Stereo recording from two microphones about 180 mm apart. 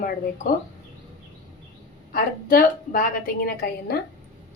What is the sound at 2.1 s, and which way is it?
A woman's voice, 50° left (ahead or behind).